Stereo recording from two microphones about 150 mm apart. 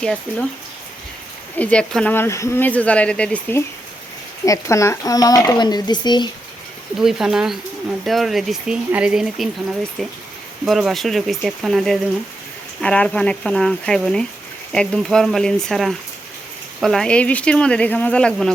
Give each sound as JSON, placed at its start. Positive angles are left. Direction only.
{"t": 0.0, "sound": "speech", "side_deg": 5}
{"t": 1.5, "sound": "speech", "side_deg": 10}
{"t": 2.1, "sound": "speech", "side_deg": 20}
{"t": 4.4, "sound": "speech", "side_deg": 20}
{"t": 7.0, "sound": "speech", "side_deg": -5}